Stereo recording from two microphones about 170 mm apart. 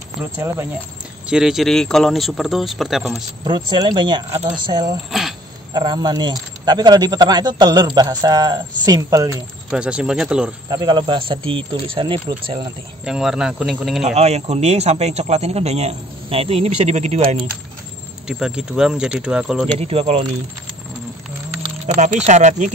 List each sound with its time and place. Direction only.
0.2 s speech: 15° right (ahead or behind)
1.2 s speech: 5° right (ahead or behind)
3.4 s a man's voice: 25° right (ahead or behind)
9.7 s speech: 5° right (ahead or behind)
10.7 s a man's voice: 25° right (ahead or behind)
13.0 s speech: 5° right (ahead or behind)
14.0 s speech: 40° right (ahead or behind)
18.2 s speech: 5° right (ahead or behind)
19.8 s speech: 35° right (ahead or behind)
21.9 s speech: 45° right (ahead or behind)